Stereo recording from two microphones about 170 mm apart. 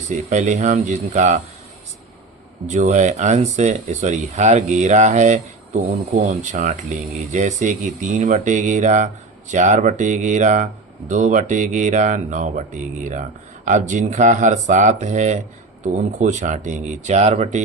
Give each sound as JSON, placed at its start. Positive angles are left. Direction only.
{"t": 0.1, "sound": "speech", "side_deg": -45}
{"t": 2.6, "sound": "speech", "side_deg": -45}